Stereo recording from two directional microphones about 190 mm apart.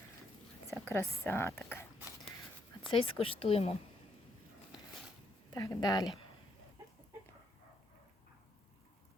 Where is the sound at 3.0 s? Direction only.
30° left (ahead or behind).